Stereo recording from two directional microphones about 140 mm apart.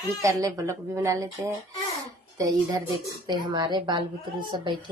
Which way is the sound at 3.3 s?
30° right (ahead or behind).